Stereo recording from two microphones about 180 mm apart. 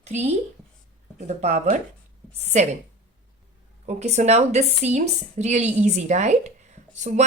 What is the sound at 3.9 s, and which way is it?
Speech, 40° right (ahead or behind).